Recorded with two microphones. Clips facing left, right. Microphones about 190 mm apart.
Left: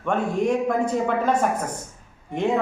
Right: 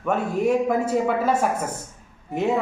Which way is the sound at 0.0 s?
5° right (ahead or behind).